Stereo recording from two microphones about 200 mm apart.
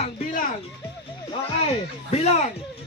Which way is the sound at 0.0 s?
40° left (ahead or behind).